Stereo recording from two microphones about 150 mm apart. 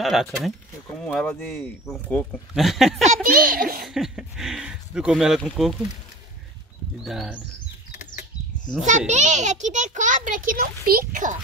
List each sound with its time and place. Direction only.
0.0 s speech: centre (ahead or behind)
3.0 s a child's voice: 60° right (ahead or behind)
3.8 s speech: 5° right (ahead or behind)
7.1 s speech: centre (ahead or behind)
8.8 s a child's voice: 55° right (ahead or behind); by 11.3 s 70° right (ahead or behind)